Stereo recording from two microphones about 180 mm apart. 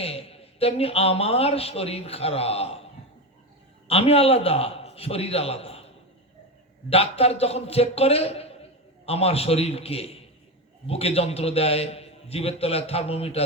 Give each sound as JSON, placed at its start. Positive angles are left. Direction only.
{"t": 0.0, "sound": "a man's voice", "side_deg": 35}
{"t": 3.8, "sound": "a man's voice", "side_deg": 35}
{"t": 6.9, "sound": "a man's voice", "side_deg": 35}